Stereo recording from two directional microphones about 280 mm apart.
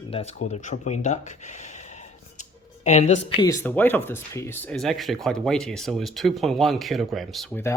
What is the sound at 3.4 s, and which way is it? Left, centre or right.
Speech, centre.